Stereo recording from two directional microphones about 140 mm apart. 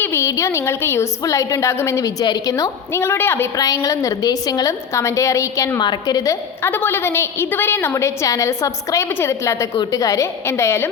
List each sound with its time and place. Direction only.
0.0 s a woman's voice: 20° left (ahead or behind)